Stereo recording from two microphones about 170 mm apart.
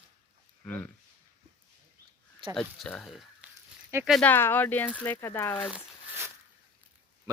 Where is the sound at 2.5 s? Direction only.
5° left (ahead or behind).